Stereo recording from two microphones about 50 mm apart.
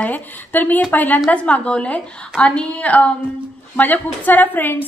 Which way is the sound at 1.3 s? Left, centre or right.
Left.